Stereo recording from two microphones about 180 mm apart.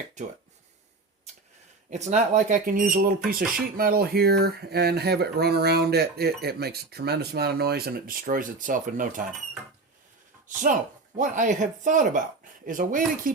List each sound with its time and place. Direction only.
0.2 s speech: 40° right (ahead or behind)
1.9 s speech: 40° right (ahead or behind)
10.5 s speech: 45° right (ahead or behind)